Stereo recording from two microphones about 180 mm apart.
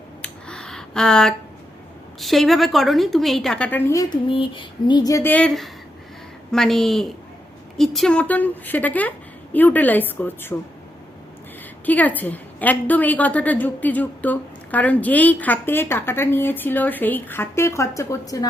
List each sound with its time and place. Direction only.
0.2 s a sound: 5° left (ahead or behind)
2.2 s a woman's voice: centre (ahead or behind); by 4.2 s 15° left (ahead or behind)
4.3 s a woman's voice: 30° left (ahead or behind); by 10.5 s 10° left (ahead or behind)
11.9 s a woman's voice: 10° left (ahead or behind)